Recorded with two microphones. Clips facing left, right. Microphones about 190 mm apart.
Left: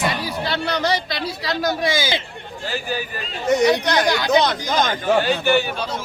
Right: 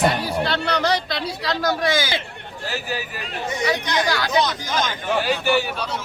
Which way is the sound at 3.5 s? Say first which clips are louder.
Left 8 dB; 70° left (ahead or behind).